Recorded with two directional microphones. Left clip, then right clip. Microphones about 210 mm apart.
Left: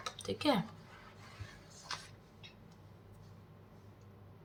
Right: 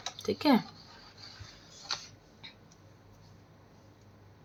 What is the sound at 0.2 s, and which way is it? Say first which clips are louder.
Speech: right 5 dB; 40° right (ahead or behind).